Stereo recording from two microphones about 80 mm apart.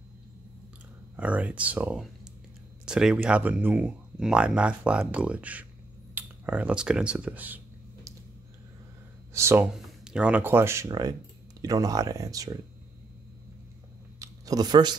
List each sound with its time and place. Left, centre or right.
1.1 s speech: centre
9.3 s speech: right
9.8 s a sound: centre
10.4 s speech: right
10.9 s speech: right
14.2 s speech: right